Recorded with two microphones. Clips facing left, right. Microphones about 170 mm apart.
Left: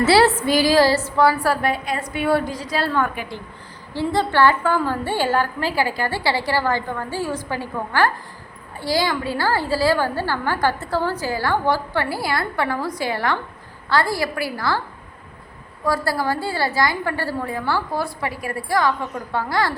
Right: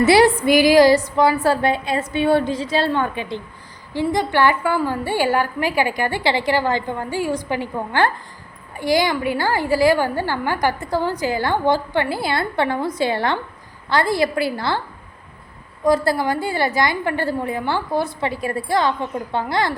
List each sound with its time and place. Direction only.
0.0 s a woman's voice: 15° right (ahead or behind)
15.8 s a woman's voice: 20° right (ahead or behind)